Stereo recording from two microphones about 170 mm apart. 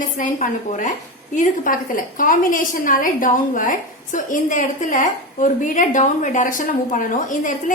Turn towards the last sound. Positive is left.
turn(degrees=50)  # may be behind; listen again after turning